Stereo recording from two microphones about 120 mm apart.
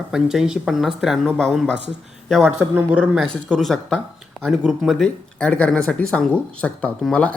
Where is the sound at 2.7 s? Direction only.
10° right (ahead or behind).